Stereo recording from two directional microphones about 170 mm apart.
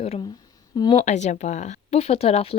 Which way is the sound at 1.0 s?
45° left (ahead or behind).